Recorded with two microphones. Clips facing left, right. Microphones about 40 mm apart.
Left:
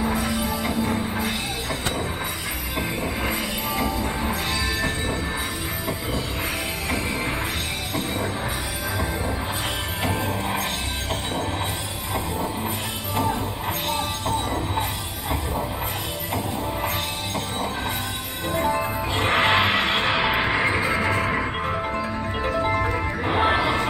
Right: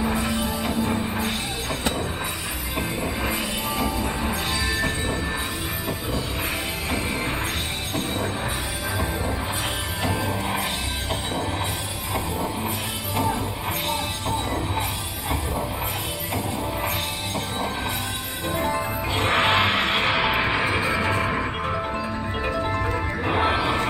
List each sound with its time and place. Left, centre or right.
0.1 s music: centre
3.0 s music: centre
14.2 s music: centre
18.5 s music: centre
22.5 s music: centre
22.8 s music: centre